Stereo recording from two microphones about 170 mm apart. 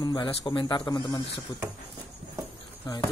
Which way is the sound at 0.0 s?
25° left (ahead or behind).